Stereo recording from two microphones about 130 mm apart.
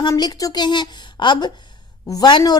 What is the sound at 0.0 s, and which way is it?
A woman's voice, 30° left (ahead or behind).